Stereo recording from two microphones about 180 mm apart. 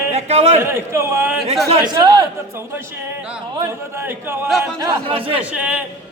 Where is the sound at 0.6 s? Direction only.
15° right (ahead or behind).